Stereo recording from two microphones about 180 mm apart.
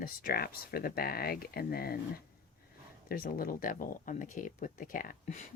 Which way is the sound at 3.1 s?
55° left (ahead or behind).